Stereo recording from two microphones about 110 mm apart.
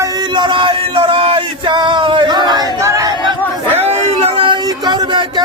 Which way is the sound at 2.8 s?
30° right (ahead or behind).